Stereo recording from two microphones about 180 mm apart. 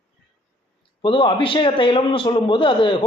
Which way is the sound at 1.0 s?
30° left (ahead or behind).